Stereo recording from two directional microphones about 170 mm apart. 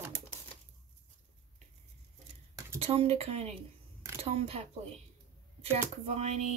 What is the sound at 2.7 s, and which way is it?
Speech, 35° right (ahead or behind).